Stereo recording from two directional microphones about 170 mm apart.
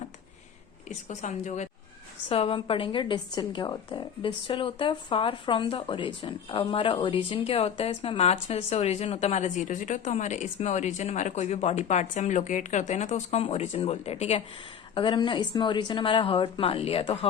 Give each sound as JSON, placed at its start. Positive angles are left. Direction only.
{"t": 0.9, "sound": "a woman's voice", "side_deg": 45}